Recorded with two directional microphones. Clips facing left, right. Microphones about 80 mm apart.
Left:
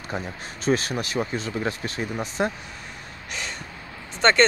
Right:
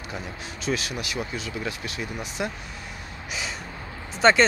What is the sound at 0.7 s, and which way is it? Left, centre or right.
Speech, left.